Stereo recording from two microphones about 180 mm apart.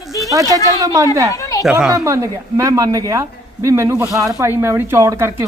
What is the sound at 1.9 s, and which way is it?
Speech, 15° right (ahead or behind).